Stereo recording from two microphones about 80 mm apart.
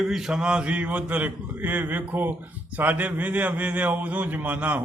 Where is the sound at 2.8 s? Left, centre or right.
Right.